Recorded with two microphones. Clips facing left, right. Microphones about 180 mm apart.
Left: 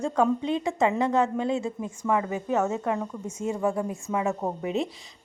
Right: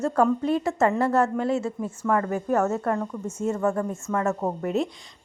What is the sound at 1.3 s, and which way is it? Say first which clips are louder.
A woman's voice: right 2 dB; 15° left (ahead or behind).